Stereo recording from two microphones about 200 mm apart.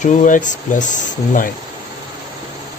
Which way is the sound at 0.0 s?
40° left (ahead or behind).